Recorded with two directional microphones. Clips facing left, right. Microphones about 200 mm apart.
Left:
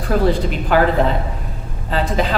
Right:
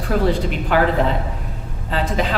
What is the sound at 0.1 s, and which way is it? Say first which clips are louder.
A woman's voice: left 2 dB; 40° left (ahead or behind).